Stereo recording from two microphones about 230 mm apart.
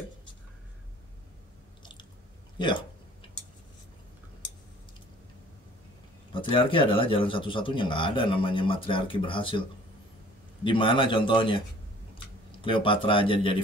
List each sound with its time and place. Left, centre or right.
6.3 s speech: left
12.6 s speech: left